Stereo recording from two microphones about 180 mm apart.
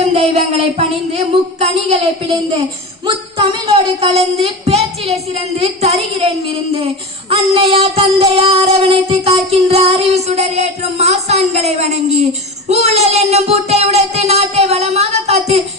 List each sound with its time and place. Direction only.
0.0 s music: 40° right (ahead or behind)
3.3 s music: 30° right (ahead or behind)